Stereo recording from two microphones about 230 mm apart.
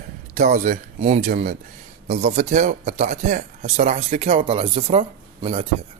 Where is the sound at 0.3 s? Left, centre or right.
Right.